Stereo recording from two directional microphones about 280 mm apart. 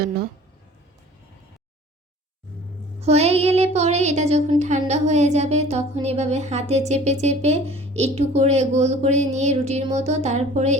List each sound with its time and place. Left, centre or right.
3.0 s child singing: right